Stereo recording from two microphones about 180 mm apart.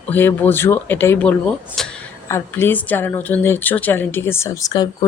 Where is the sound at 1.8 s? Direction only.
Centre (ahead or behind).